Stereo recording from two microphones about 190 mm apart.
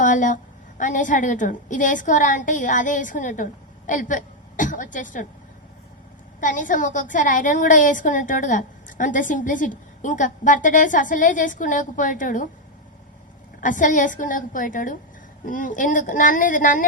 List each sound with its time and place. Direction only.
0.0 s a woman's voice: 40° left (ahead or behind)
6.4 s a woman's voice: 45° left (ahead or behind)
13.6 s a woman's voice: 45° left (ahead or behind)